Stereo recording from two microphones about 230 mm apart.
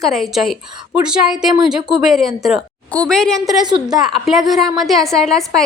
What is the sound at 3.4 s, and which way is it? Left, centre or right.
Speech, centre.